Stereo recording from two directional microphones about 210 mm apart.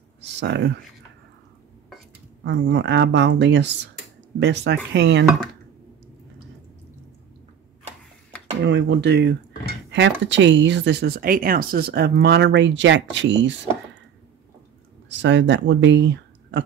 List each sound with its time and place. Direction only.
0.2 s speech: 55° right (ahead or behind)
2.4 s speech: 60° right (ahead or behind)
8.6 s speech: 55° right (ahead or behind)
15.0 s speech: 60° right (ahead or behind)